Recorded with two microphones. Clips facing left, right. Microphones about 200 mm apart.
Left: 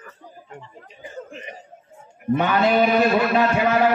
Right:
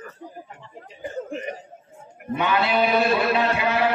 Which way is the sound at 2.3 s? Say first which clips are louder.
Left 4 dB; 45° left (ahead or behind).